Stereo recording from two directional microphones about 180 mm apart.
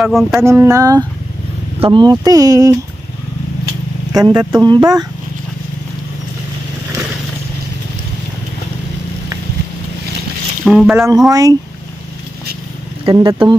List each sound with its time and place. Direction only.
0.0 s a sound: centre (ahead or behind)
0.4 s a sound: 15° right (ahead or behind)
1.8 s speech: 25° right (ahead or behind)
4.1 s speech: 20° right (ahead or behind)
10.6 s speech: centre (ahead or behind)
11.0 s speech: 20° right (ahead or behind)
13.0 s speech: 25° right (ahead or behind)